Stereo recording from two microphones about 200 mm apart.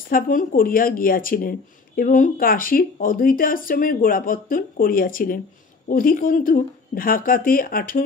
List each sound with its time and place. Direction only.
0.1 s speech: 45° left (ahead or behind)